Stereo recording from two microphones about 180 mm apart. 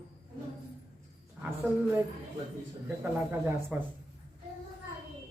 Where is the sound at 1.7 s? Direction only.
15° right (ahead or behind).